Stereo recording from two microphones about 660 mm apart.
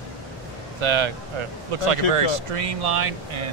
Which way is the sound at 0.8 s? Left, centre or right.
Right.